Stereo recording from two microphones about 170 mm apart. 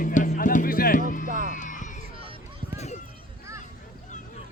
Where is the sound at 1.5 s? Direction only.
50° left (ahead or behind).